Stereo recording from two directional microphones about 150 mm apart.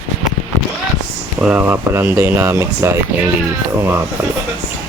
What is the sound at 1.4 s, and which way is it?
Speech, 5° right (ahead or behind).